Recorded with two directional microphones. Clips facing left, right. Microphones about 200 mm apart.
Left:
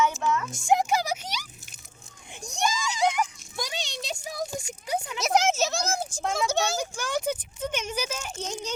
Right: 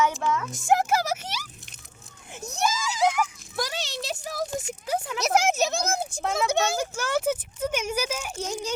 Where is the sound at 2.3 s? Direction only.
5° right (ahead or behind).